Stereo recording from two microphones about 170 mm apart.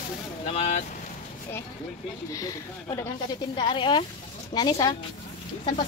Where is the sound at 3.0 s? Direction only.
25° left (ahead or behind).